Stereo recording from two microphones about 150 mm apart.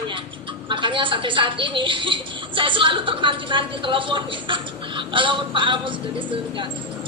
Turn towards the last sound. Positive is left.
turn(degrees=-35)  # may be behind; listen again after turning